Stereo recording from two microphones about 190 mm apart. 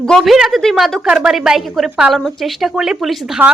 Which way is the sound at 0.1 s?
Centre (ahead or behind).